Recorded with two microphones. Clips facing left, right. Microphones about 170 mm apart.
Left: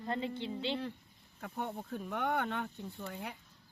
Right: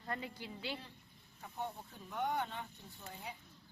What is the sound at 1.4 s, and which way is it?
Speech, 65° left (ahead or behind).